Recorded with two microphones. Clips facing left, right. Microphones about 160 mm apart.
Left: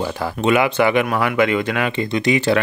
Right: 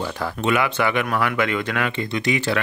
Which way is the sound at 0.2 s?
15° left (ahead or behind).